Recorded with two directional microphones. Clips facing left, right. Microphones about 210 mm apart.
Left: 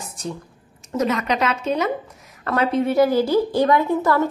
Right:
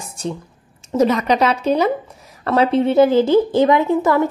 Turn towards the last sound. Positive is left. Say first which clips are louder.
# right 3 dB
turn(degrees=-15)  # may be behind; listen again after turning